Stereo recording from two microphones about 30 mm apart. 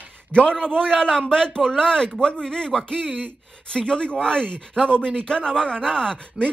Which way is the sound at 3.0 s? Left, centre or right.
Right.